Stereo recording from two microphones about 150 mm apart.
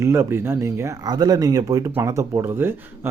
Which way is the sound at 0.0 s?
20° right (ahead or behind).